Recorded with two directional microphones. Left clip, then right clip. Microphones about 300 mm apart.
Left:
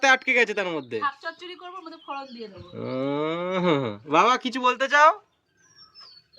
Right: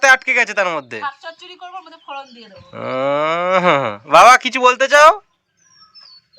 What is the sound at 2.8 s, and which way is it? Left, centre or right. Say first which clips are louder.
Speech: right 10 dB; centre.